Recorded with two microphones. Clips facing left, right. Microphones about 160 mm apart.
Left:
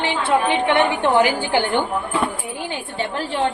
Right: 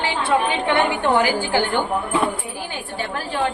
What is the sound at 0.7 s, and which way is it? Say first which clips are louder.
A woman's voice: left 1 dB; 20° left (ahead or behind).